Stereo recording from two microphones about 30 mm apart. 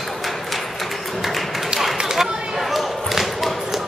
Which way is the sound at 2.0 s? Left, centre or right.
Centre.